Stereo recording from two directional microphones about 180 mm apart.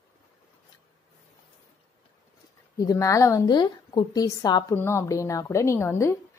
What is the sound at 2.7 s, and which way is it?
A woman's voice, 20° left (ahead or behind).